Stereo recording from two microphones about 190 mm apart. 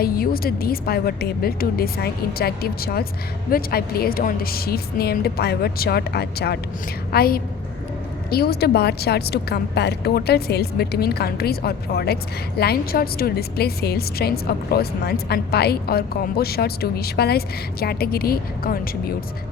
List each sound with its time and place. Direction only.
0.0 s a woman's voice: 50° left (ahead or behind)